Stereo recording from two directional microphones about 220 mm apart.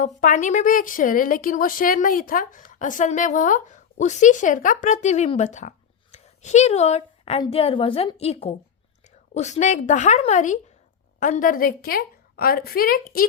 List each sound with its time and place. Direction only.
0.2 s speech: 35° left (ahead or behind)